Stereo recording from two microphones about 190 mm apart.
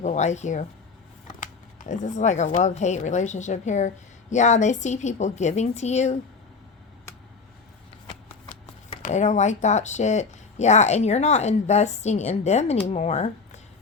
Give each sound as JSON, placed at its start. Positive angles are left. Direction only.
{"t": 0.0, "sound": "speech", "side_deg": 40}
{"t": 8.1, "sound": "shuffling cards", "side_deg": 40}
{"t": 9.0, "sound": "speech", "side_deg": 40}